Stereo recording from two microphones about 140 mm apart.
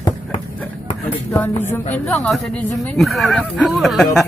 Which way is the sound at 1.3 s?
15° left (ahead or behind).